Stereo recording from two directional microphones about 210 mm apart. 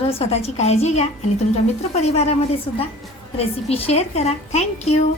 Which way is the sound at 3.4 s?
30° left (ahead or behind).